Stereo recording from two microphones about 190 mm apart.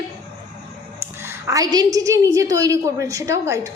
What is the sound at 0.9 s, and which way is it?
A woman's voice, 15° right (ahead or behind).